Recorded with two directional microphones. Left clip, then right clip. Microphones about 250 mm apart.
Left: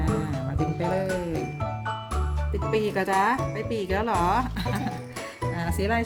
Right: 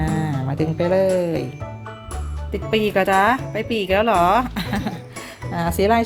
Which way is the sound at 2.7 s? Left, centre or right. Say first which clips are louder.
Right 7 dB; centre.